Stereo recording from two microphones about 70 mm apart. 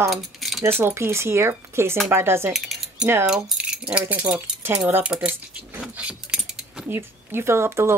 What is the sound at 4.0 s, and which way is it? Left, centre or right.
Speech, right.